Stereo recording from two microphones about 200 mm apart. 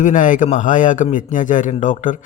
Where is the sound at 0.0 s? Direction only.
40° left (ahead or behind).